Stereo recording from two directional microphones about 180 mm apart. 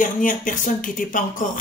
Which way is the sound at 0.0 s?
45° left (ahead or behind).